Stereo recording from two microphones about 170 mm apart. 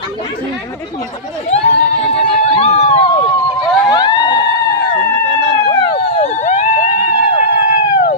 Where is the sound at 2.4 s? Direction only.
40° left (ahead or behind).